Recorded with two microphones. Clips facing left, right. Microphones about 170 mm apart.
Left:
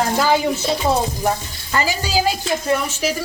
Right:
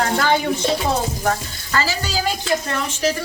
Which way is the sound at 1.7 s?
15° left (ahead or behind).